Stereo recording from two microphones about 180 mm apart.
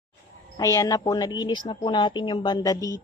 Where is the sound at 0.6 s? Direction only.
20° left (ahead or behind).